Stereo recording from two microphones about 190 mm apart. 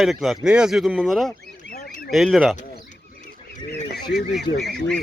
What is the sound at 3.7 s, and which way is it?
Goose, 60° left (ahead or behind).